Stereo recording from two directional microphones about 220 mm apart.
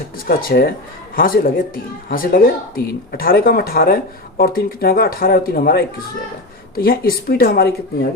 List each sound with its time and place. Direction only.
0.3 s speech: 40° left (ahead or behind)